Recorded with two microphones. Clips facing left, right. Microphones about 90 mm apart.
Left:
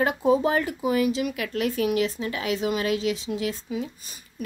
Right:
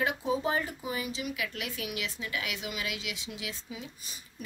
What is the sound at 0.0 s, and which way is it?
Speech, 55° left (ahead or behind).